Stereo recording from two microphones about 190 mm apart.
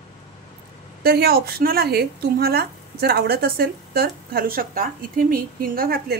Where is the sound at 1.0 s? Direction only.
55° right (ahead or behind).